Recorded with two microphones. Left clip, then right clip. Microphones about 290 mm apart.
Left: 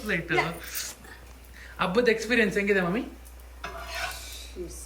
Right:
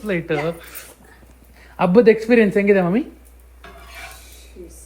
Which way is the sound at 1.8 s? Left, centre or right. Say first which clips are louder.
Right 10 dB; centre.